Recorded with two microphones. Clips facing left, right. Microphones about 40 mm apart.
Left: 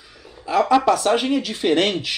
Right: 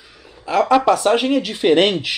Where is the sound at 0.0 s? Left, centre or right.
Centre.